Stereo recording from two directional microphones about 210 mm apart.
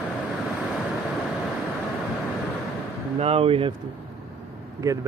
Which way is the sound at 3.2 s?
30° right (ahead or behind).